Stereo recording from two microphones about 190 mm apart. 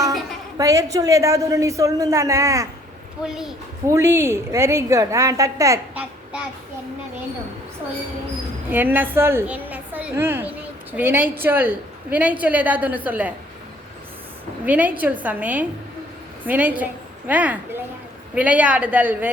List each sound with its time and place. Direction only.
0.5 s a woman's voice: 15° right (ahead or behind)
3.2 s a woman's voice: 5° right (ahead or behind)
3.8 s a woman's voice: 15° right (ahead or behind)
8.7 s a woman's voice: 10° right (ahead or behind)
14.6 s a woman's voice: 10° right (ahead or behind)